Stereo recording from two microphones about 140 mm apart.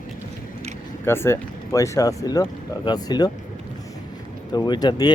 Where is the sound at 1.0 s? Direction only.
15° left (ahead or behind).